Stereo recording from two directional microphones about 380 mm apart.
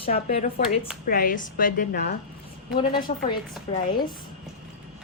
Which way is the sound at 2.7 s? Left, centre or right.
Centre.